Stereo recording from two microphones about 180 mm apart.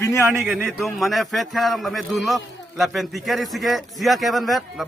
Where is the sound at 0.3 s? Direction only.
Centre (ahead or behind).